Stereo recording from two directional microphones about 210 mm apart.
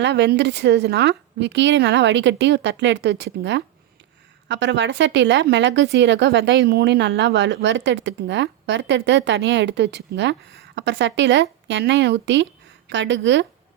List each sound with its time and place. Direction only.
0.0 s a woman's voice: 55° right (ahead or behind)